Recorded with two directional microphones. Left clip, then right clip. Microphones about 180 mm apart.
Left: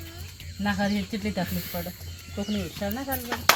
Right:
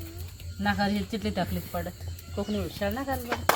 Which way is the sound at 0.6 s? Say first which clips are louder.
Even; 15° left (ahead or behind).